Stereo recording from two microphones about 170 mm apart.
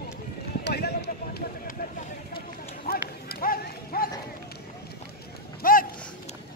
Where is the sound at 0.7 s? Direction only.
75° left (ahead or behind).